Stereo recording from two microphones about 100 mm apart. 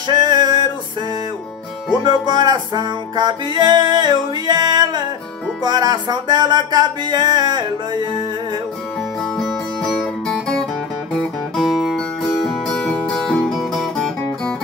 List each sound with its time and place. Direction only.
0.1 s music: 45° right (ahead or behind)
2.0 s music: 45° right (ahead or behind)
9.8 s music: 5° left (ahead or behind)